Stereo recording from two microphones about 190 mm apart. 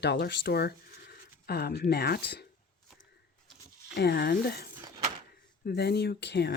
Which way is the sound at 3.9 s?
55° left (ahead or behind).